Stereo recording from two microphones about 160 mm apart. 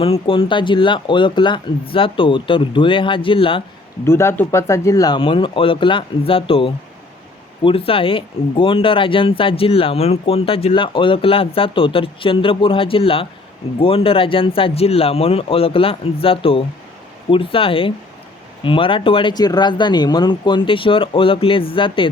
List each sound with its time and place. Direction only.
0.0 s speech: 35° left (ahead or behind)
4.0 s speech: 15° left (ahead or behind); by 22.1 s 30° left (ahead or behind)